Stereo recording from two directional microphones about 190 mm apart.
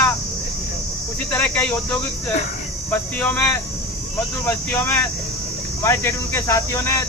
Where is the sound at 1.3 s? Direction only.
10° left (ahead or behind).